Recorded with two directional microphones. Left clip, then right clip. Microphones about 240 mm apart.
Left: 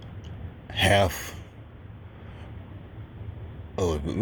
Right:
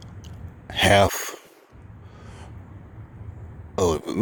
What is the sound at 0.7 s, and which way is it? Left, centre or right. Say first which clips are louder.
Speech: right 4 dB; right.